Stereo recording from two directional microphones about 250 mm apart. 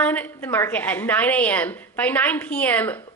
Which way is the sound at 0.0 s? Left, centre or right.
Centre.